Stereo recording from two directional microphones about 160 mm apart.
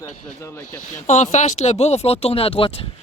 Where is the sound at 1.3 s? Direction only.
45° left (ahead or behind).